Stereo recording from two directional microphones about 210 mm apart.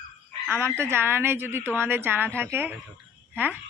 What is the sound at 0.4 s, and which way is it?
Speech, 10° right (ahead or behind).